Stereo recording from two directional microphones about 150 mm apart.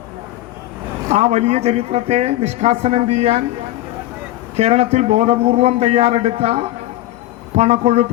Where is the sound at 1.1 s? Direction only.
45° right (ahead or behind).